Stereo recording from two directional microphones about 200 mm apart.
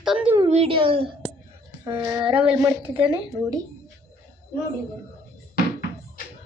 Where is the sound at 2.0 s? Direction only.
10° right (ahead or behind).